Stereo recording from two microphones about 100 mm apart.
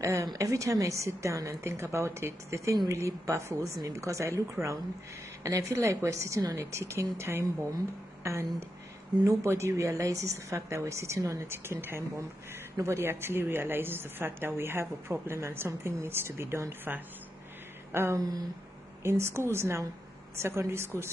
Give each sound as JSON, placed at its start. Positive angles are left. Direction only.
{"t": 0.0, "sound": "a woman's voice", "side_deg": -30}